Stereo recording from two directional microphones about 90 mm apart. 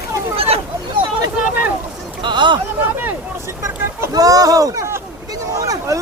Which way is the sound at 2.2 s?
60° right (ahead or behind).